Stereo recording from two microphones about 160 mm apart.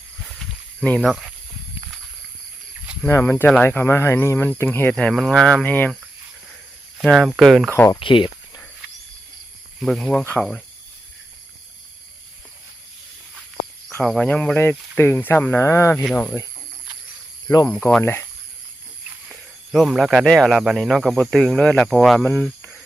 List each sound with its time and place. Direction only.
0.3 s a sound: 5° left (ahead or behind)
3.0 s speech: 15° left (ahead or behind)
7.0 s speech: centre (ahead or behind)
7.7 s speech: 15° left (ahead or behind)
7.9 s a sound: 30° left (ahead or behind)
9.8 s speech: centre (ahead or behind)
13.9 s speech: 5° left (ahead or behind)
17.7 s speech: 5° left (ahead or behind)
19.3 s speech: centre (ahead or behind)
22.2 s speech: 15° left (ahead or behind)